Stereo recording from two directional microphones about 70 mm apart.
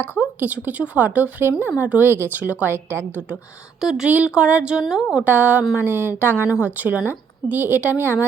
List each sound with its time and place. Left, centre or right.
0.3 s a woman's voice: right
2.7 s speech: right
3.8 s a woman's voice: centre
4.1 s a woman's voice: centre
5.2 s a woman's voice: right